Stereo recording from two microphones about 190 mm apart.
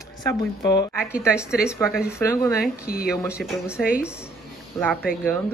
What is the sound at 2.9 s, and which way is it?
Speech, 50° left (ahead or behind).